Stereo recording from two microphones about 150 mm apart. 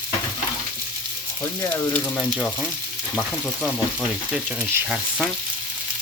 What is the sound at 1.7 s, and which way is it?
Speech, 10° left (ahead or behind).